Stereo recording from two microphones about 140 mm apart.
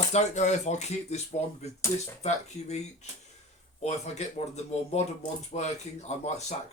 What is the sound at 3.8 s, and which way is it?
Speech, 50° left (ahead or behind).